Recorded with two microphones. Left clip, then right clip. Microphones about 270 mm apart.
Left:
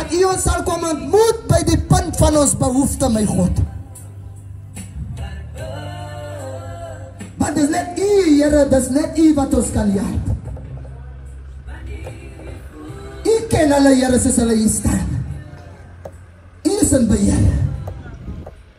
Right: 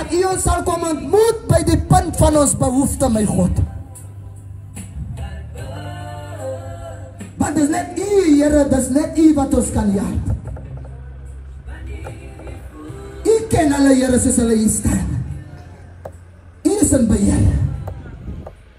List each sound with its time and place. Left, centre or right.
0.0 s speech: right
5.6 s music: right
7.3 s speech: right
13.5 s speech: centre
16.6 s a sound: right